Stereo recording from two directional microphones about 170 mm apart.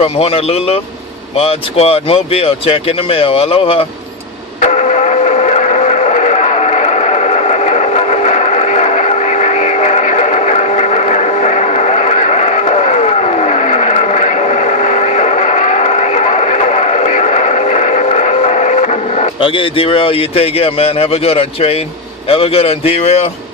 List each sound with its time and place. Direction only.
0.0 s speech: 35° left (ahead or behind)
4.6 s a sound: 45° left (ahead or behind)
22.3 s speech: 35° left (ahead or behind)